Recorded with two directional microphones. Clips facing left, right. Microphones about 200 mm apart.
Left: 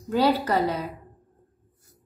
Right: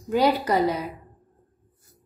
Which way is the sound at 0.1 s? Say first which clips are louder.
Right 1 dB; 15° right (ahead or behind).